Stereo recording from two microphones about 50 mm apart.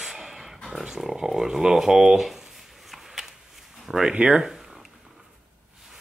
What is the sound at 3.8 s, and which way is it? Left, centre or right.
Speech, centre.